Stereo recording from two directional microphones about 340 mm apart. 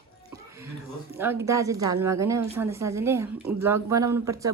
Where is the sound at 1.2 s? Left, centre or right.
Centre.